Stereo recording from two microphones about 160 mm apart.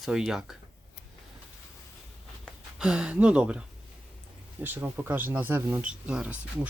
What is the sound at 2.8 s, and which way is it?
Speech, 5° right (ahead or behind).